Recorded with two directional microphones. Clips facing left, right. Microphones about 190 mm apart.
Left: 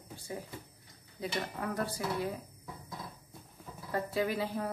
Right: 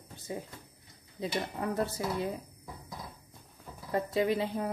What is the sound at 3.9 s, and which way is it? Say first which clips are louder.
Speech: right 4 dB; 20° right (ahead or behind).